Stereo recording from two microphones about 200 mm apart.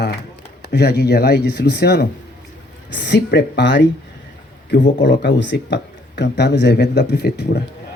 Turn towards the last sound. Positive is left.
turn(degrees=55)  # may be behind; listen again after turning